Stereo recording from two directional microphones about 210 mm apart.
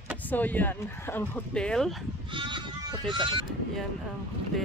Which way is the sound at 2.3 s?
20° right (ahead or behind).